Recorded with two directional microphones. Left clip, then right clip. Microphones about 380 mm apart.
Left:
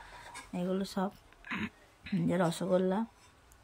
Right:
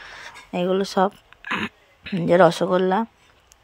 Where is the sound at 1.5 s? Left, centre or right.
Centre.